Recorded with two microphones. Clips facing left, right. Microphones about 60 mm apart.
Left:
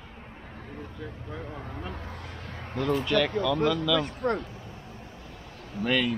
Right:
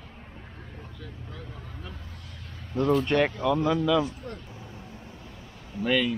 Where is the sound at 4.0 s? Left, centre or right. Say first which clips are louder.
Left 2 dB; left.